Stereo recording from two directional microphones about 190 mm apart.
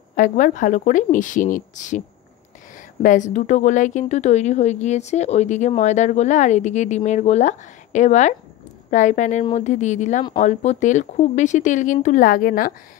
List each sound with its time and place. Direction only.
0.1 s a woman's voice: 45° left (ahead or behind)